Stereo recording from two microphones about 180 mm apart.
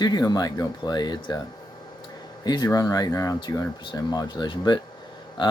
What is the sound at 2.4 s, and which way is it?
Speech, 20° left (ahead or behind).